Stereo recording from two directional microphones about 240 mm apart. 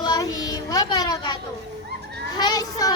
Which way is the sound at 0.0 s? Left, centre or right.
Centre.